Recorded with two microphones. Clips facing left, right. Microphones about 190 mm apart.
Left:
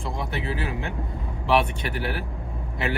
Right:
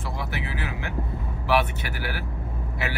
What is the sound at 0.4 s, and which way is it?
Vehicle, 25° left (ahead or behind).